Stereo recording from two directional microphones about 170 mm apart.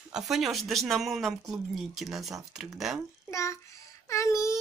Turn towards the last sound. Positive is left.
turn(degrees=20)  # may be behind; listen again after turning